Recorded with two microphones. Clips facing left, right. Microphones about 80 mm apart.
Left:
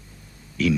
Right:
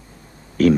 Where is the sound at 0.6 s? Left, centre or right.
Right.